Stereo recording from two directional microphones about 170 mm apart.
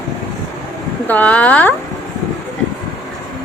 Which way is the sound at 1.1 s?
10° left (ahead or behind).